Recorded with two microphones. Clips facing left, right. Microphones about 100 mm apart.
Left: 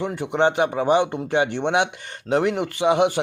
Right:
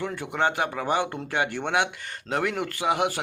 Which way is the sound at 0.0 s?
20° left (ahead or behind).